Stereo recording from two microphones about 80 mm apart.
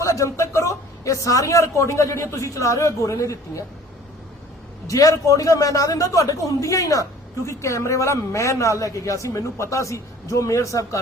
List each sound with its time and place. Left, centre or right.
0.0 s a man's voice: left
4.9 s a man's voice: left